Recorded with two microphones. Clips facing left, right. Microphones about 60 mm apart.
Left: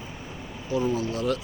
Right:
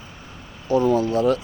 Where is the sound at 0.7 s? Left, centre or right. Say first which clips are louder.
Right 8 dB; right.